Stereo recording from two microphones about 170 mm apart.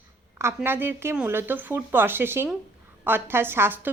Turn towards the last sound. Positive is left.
turn(degrees=-15)  # may be behind; listen again after turning